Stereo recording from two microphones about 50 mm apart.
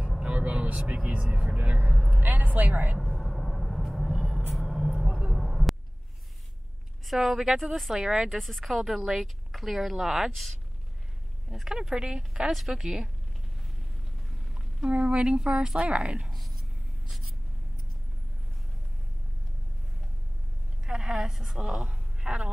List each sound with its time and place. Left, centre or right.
0.2 s vehicle: right
1.3 s a woman's voice: right
3.0 s vehicle: centre
4.5 s a sound: centre
7.1 s a woman's voice: centre
8.4 s speech: centre
11.9 s a woman's voice: centre
14.9 s a woman's voice: right
16.3 s whispering: centre
20.8 s a woman's voice: centre
21.8 s a sound: right